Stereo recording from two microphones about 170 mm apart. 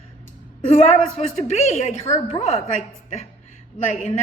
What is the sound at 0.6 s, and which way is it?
A woman's voice, 45° left (ahead or behind).